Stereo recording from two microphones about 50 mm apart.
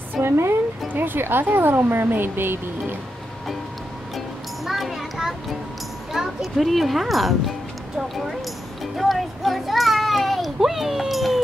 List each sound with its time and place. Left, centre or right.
0.2 s a woman's voice: right
0.9 s speech: right
4.6 s a child's voice: centre
8.9 s a sound: centre